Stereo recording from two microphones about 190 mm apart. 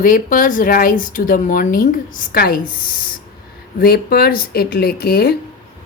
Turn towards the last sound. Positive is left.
turn(degrees=55)  # may be behind; listen again after turning